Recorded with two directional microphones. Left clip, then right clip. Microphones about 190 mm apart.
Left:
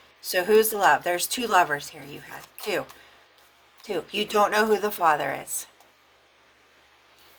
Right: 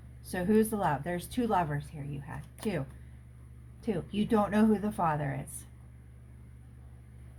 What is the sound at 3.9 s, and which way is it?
Speech, 35° left (ahead or behind).